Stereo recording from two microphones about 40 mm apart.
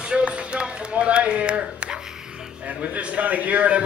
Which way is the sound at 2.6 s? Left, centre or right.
Right.